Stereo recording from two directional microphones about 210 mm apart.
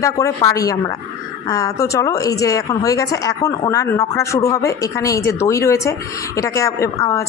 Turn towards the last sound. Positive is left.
turn(degrees=15)  # may be behind; listen again after turning